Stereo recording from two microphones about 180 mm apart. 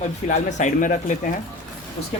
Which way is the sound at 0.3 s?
40° left (ahead or behind).